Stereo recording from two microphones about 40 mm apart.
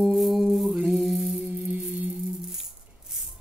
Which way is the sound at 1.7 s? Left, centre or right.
Right.